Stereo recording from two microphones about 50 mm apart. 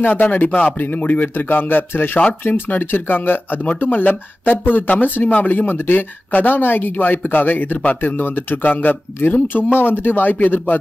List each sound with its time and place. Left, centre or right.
0.0 s speech: left
7.8 s speech: left